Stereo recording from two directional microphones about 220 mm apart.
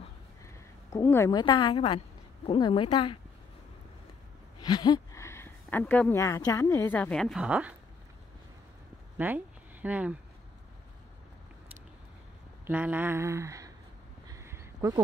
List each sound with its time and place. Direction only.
0.9 s a woman's voice: 15° left (ahead or behind)
4.6 s speech: 15° left (ahead or behind); by 7.7 s 5° right (ahead or behind)
9.2 s speech: 10° right (ahead or behind)
12.6 s a sound: 10° right (ahead or behind)